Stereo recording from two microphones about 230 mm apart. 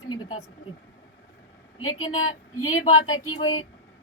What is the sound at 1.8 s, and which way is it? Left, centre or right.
A woman's voice, left.